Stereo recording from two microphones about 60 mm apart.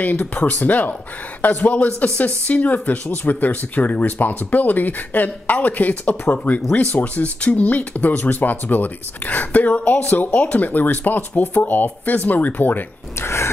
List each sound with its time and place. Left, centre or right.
0.0 s speech: left